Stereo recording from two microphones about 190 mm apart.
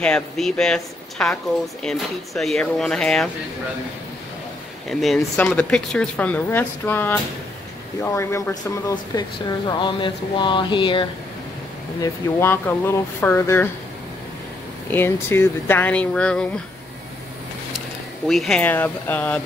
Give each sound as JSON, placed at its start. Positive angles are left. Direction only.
{"t": 0.0, "sound": "speech", "side_deg": 5}
{"t": 4.8, "sound": "speech", "side_deg": 0}
{"t": 9.7, "sound": "a sound", "side_deg": 25}
{"t": 12.0, "sound": "speech", "side_deg": 10}
{"t": 14.9, "sound": "speech", "side_deg": 10}
{"t": 17.7, "sound": "speech", "side_deg": 0}